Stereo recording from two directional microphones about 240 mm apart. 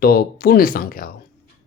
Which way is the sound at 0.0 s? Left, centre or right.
Left.